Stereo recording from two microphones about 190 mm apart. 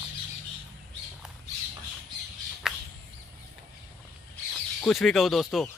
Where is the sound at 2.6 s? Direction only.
5° right (ahead or behind).